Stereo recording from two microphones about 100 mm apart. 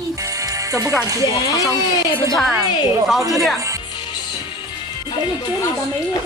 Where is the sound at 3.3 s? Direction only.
Centre (ahead or behind).